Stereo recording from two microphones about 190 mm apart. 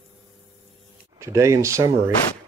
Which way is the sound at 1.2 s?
15° right (ahead or behind).